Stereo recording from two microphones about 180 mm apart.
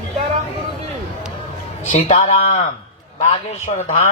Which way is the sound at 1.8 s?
40° left (ahead or behind).